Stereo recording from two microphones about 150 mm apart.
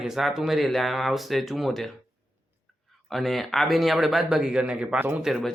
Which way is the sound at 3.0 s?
Centre (ahead or behind).